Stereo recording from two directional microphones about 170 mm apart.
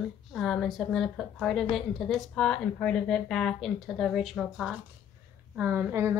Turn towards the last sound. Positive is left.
turn(degrees=-15)  # may be behind; listen again after turning